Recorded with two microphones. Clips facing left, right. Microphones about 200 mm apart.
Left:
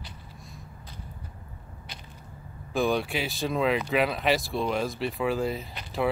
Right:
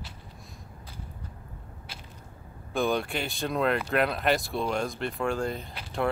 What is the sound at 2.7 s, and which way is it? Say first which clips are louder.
Speech: left 1 dB; centre (ahead or behind).